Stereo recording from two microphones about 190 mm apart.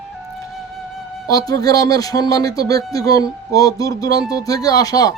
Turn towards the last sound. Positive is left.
turn(degrees=20)  # may be behind; listen again after turning